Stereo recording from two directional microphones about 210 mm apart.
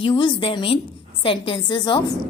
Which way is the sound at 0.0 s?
25° left (ahead or behind).